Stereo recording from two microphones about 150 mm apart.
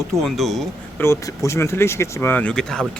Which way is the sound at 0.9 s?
20° left (ahead or behind).